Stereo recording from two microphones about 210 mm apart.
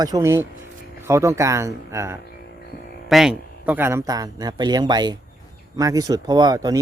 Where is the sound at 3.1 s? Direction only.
5° right (ahead or behind).